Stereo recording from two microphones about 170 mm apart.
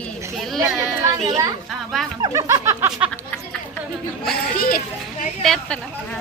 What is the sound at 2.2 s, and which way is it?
Speech, 20° right (ahead or behind).